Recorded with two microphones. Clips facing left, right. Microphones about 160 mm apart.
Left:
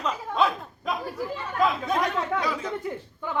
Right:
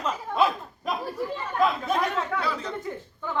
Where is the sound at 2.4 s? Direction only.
10° left (ahead or behind).